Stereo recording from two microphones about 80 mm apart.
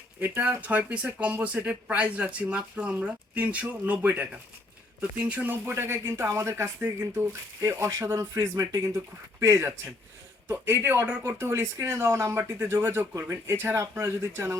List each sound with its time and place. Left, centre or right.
0.2 s speech: right
5.7 s speech: right
7.6 s speech: right